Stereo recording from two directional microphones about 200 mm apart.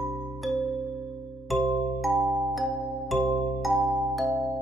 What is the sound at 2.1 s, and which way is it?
Music, 20° right (ahead or behind).